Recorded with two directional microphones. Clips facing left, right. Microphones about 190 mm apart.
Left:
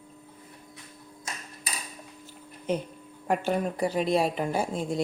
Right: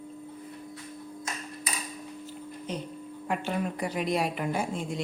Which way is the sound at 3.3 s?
40° left (ahead or behind).